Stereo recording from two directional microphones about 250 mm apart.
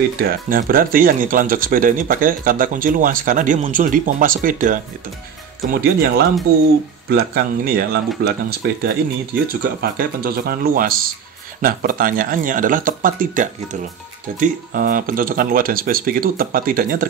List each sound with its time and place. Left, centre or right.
0.2 s speech: right